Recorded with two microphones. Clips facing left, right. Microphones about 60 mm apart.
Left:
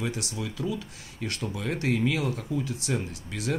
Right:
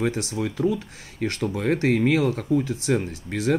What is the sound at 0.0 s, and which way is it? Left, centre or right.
Speech, right.